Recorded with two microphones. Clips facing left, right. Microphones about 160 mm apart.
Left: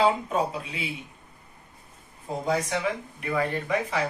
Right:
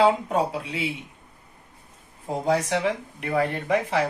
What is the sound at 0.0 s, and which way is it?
A man's voice, 70° right (ahead or behind).